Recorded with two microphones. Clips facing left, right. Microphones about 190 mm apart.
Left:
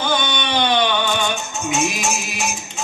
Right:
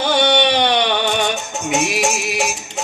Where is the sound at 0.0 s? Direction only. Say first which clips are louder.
Right 7 dB; 70° right (ahead or behind).